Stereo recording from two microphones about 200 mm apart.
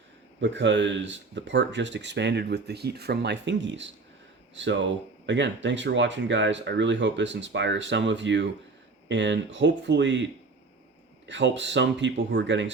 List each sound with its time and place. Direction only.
0.4 s speech: 65° right (ahead or behind)
11.3 s speech: 65° right (ahead or behind)